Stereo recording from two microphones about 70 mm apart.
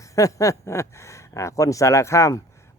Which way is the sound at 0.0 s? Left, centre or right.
Left.